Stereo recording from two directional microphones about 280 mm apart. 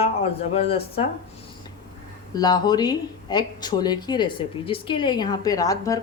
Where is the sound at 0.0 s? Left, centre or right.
Left.